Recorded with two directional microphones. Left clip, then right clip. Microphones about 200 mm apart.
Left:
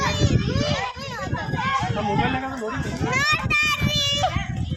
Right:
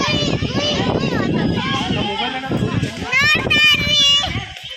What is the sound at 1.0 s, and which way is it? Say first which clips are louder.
Vehicle: right 11 dB; 10° right (ahead or behind).